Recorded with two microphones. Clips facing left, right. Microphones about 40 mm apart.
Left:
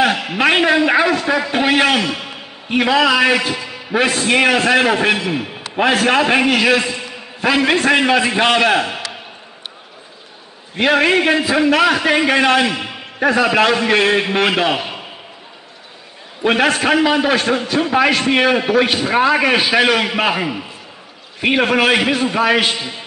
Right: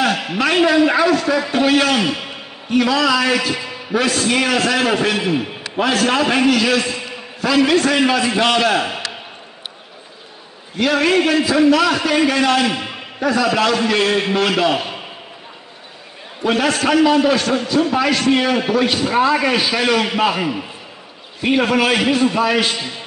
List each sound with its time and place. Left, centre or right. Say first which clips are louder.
0.4 s a man's voice: even; left
10.8 s a man's voice: left 2 dB; left
16.4 s a man's voice: left 2 dB; left
21.4 s a man's voice: left 1 dB; left
21.6 s a man's voice: left 1 dB; left